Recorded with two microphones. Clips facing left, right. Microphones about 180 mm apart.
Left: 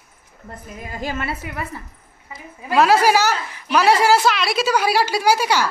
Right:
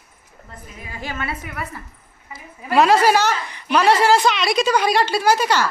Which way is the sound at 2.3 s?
Centre (ahead or behind).